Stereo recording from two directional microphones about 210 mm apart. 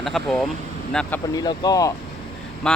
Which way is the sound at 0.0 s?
Centre (ahead or behind).